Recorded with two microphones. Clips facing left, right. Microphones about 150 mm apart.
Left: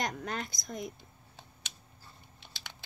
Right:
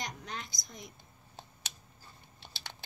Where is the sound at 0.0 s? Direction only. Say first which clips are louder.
Left 6 dB; 55° left (ahead or behind).